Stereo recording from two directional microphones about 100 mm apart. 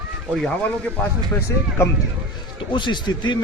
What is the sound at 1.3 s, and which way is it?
Speech, 25° left (ahead or behind).